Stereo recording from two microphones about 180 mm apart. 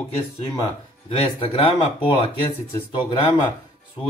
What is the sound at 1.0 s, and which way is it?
Speech, 30° left (ahead or behind).